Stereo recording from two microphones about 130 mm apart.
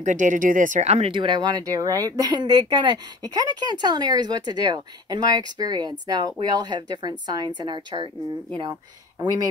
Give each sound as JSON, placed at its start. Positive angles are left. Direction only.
{"t": 0.0, "sound": "speech", "side_deg": -75}
{"t": 1.1, "sound": "speech", "side_deg": -35}